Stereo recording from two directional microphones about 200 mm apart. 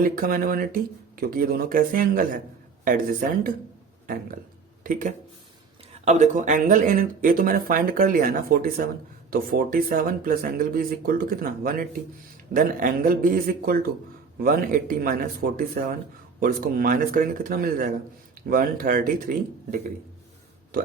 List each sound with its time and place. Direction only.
0.0 s speech: 45° right (ahead or behind)